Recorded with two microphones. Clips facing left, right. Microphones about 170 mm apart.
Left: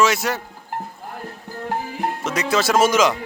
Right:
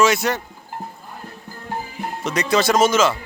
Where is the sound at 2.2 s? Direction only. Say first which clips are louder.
Right 3 dB; 5° left (ahead or behind).